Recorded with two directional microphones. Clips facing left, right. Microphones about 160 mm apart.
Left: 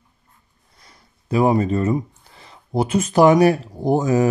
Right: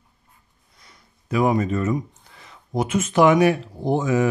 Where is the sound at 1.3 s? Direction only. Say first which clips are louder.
Left 3 dB; 35° left (ahead or behind).